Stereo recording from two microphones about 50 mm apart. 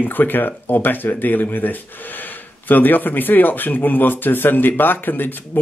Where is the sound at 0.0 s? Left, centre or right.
Left.